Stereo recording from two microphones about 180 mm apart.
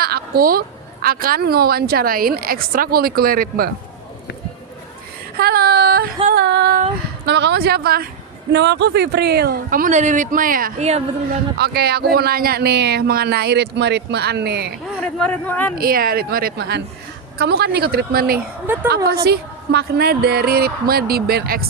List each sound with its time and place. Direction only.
0.0 s a woman's voice: 55° right (ahead or behind)
5.4 s a woman's voice: 60° right (ahead or behind)
6.3 s a woman's voice: 70° right (ahead or behind)
8.5 s speech: 70° right (ahead or behind); by 11.0 s 40° right (ahead or behind)
11.5 s a woman's voice: 65° right (ahead or behind)
15.0 s speech: 10° left (ahead or behind)
15.7 s a woman's voice: 55° right (ahead or behind)
18.3 s speech: 10° right (ahead or behind)
19.1 s a woman's voice: 60° right (ahead or behind)